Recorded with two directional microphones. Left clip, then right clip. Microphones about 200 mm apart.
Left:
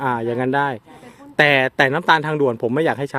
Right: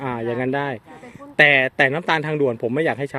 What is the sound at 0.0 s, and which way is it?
A man's voice, 25° left (ahead or behind).